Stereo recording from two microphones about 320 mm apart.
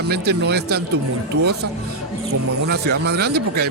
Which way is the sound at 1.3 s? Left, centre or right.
Right.